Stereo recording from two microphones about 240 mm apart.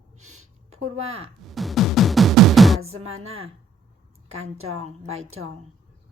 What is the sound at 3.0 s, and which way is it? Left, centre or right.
A woman's voice, right.